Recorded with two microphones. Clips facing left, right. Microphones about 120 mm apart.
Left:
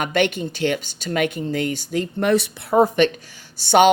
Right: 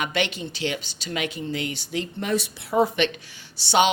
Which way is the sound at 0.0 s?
50° left (ahead or behind).